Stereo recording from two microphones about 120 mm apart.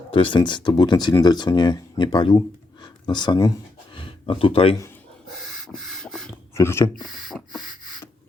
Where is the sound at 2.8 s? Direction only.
35° left (ahead or behind).